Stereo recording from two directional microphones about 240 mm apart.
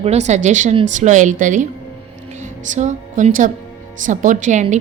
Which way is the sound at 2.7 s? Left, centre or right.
Right.